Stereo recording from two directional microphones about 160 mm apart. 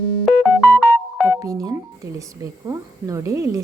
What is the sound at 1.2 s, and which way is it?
A woman's voice, 20° right (ahead or behind).